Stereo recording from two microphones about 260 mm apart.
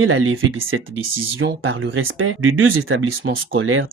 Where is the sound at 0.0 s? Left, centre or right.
Right.